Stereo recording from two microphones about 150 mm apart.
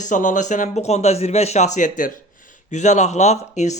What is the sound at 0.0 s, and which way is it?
Speech, 55° left (ahead or behind).